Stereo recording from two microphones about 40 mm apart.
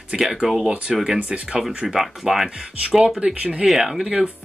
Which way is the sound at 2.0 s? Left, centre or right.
Centre.